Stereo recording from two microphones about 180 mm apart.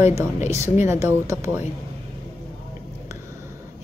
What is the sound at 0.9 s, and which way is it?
Speech, 15° right (ahead or behind).